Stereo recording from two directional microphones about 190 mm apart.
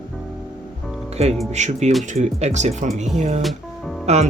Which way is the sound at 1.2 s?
35° right (ahead or behind).